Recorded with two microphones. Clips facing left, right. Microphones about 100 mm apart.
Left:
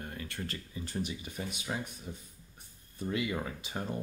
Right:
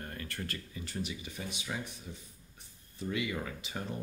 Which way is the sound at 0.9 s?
40° left (ahead or behind).